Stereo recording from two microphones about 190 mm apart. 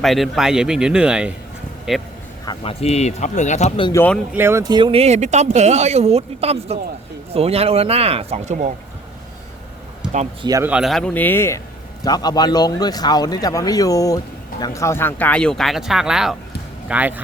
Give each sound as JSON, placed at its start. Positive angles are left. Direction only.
{"t": 0.0, "sound": "speech", "side_deg": 0}
{"t": 2.4, "sound": "speech", "side_deg": 20}
{"t": 2.8, "sound": "speech", "side_deg": 35}
{"t": 3.9, "sound": "speech", "side_deg": 10}
{"t": 4.3, "sound": "speech", "side_deg": -10}
{"t": 10.0, "sound": "a sound", "side_deg": -5}
{"t": 10.4, "sound": "speech", "side_deg": -20}
{"t": 10.7, "sound": "a man's voice", "side_deg": 0}